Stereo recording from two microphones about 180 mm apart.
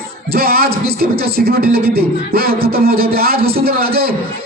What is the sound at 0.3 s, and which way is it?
Speech, 60° right (ahead or behind).